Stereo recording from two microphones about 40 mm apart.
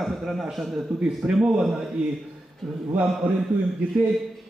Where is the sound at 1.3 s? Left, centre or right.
Centre.